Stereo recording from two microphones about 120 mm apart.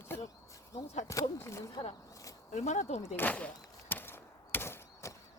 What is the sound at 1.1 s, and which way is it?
Speech, 25° left (ahead or behind).